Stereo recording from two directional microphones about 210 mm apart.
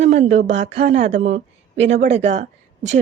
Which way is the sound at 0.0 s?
30° right (ahead or behind).